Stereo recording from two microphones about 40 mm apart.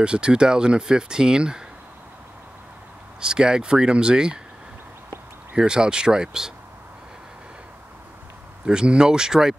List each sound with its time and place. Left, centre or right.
0.0 s speech: right
3.2 s speech: right
5.6 s speech: right
8.6 s speech: centre